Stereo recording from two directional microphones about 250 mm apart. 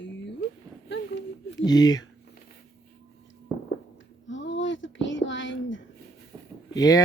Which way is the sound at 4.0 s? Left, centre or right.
Left.